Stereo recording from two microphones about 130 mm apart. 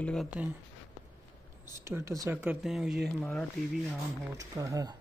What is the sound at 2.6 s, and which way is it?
Speech, 5° right (ahead or behind).